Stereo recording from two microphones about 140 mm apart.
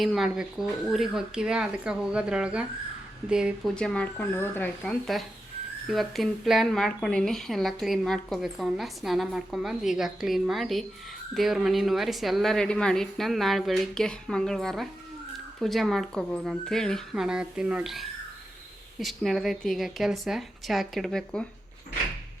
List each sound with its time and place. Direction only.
0.0 s speech: centre (ahead or behind)
3.8 s speech: 5° left (ahead or behind)